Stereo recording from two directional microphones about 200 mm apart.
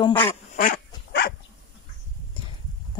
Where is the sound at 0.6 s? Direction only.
50° left (ahead or behind).